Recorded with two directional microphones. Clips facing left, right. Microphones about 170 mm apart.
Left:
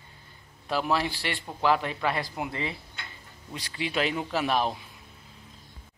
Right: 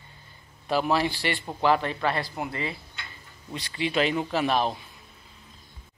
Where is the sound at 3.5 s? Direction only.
5° left (ahead or behind).